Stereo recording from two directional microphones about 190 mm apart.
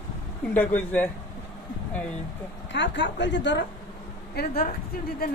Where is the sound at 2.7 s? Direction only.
70° left (ahead or behind).